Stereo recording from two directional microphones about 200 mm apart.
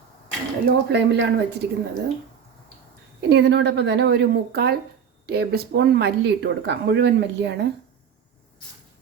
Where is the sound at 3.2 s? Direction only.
55° right (ahead or behind).